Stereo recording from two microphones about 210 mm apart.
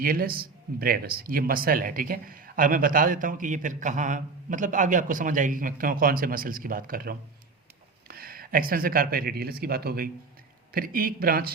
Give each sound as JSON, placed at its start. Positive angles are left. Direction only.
{"t": 0.0, "sound": "speech", "side_deg": -45}